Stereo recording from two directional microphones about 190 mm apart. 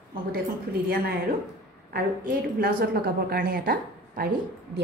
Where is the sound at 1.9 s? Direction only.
50° right (ahead or behind).